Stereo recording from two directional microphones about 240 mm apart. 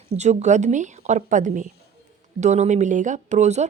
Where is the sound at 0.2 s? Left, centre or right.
Right.